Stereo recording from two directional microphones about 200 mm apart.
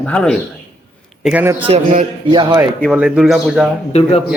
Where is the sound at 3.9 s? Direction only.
30° left (ahead or behind).